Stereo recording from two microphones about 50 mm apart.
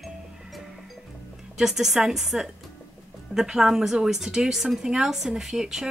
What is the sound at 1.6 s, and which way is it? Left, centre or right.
A woman's voice, centre.